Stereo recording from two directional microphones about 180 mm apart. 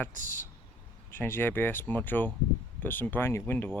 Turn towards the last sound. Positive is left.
turn(degrees=10)  # may be behind; listen again after turning